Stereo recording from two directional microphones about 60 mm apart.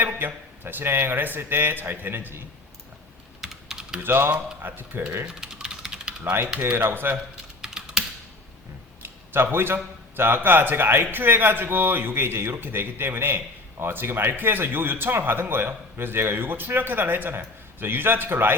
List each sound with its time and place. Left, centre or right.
0.0 s a man's voice: right
3.4 s typing: centre
4.0 s a man's voice: right
5.2 s typing: centre
6.7 s a man's voice: right
7.6 s typing: centre
9.0 s a man's voice: right